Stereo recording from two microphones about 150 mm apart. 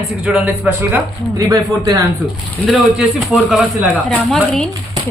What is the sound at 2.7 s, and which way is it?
A woman's voice, 5° right (ahead or behind).